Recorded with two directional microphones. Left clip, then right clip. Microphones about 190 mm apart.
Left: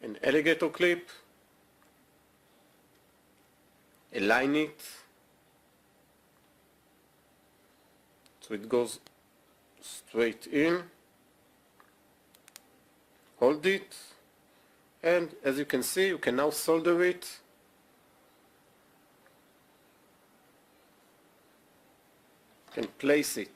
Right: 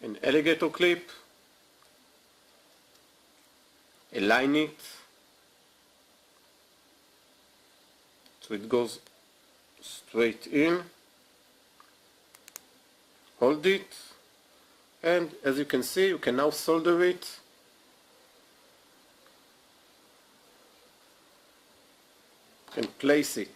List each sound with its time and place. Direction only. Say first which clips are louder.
0.0 s speech: right 1 dB; 25° left (ahead or behind)
4.1 s speech: right 2 dB; 25° left (ahead or behind)
8.4 s speech: right 1 dB; 25° left (ahead or behind)
13.4 s speech: right 1 dB; 25° left (ahead or behind)
15.0 s speech: right 1 dB; 25° left (ahead or behind)
22.7 s speech: right 2 dB; 20° left (ahead or behind)